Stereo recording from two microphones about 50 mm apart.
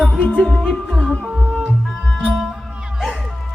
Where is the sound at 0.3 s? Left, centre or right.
Centre.